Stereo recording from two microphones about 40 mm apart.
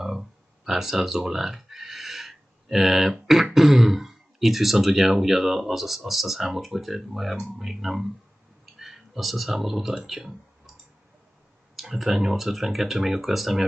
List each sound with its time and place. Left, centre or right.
0.7 s speech: centre
11.7 s speech: centre